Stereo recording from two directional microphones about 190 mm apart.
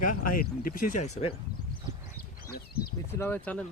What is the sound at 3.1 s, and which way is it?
Speech, 10° left (ahead or behind).